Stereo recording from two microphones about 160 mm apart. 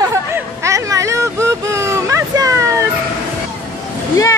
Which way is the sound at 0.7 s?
20° right (ahead or behind).